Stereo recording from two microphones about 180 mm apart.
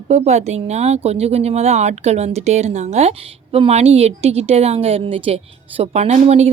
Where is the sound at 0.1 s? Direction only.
35° right (ahead or behind).